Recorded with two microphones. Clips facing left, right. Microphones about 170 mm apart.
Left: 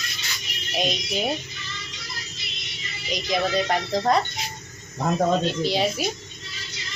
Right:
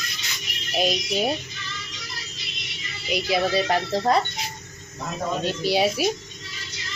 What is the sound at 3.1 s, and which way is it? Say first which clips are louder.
A woman's voice: right 2 dB; 5° right (ahead or behind).